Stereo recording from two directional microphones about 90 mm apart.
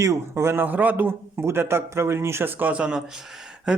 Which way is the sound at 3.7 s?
10° right (ahead or behind).